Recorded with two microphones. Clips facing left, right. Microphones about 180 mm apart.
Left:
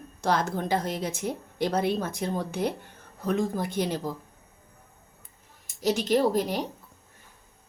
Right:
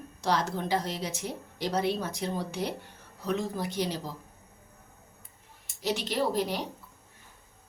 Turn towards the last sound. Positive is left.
turn(degrees=45)  # may be behind; listen again after turning